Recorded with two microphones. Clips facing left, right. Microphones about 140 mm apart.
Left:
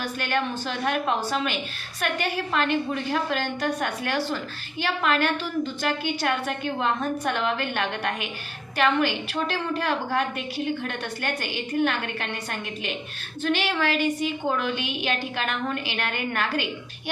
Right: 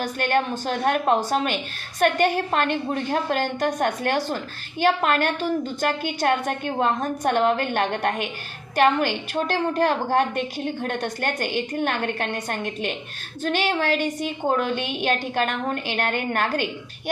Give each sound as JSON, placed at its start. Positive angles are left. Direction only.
{"t": 0.0, "sound": "a woman's voice", "side_deg": -45}